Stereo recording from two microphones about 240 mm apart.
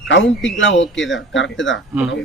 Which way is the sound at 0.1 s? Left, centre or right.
Left.